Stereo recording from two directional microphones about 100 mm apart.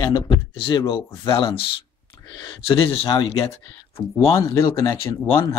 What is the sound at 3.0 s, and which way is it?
Speech, 55° left (ahead or behind).